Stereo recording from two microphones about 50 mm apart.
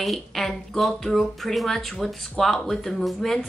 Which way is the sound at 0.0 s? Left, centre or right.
Centre.